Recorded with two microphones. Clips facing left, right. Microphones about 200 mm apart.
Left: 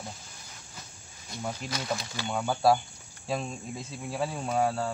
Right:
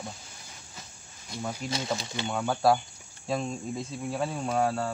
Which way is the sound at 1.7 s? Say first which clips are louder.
Right 2 dB; 25° right (ahead or behind).